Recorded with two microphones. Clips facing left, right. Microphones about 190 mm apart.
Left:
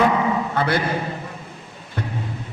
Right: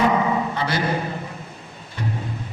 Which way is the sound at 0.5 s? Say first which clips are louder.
Left 4 dB; 55° left (ahead or behind).